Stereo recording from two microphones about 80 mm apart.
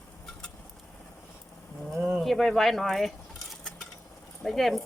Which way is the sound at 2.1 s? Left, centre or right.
Centre.